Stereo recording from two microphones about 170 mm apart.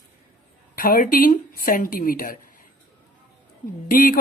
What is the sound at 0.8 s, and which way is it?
Speech, 55° left (ahead or behind).